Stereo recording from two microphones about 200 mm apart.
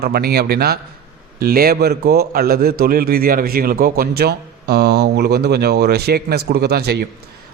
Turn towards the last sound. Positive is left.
turn(degrees=-55)  # may be behind; listen again after turning